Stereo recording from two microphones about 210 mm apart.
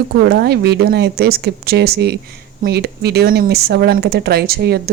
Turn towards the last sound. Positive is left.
turn(degrees=-50)  # may be behind; listen again after turning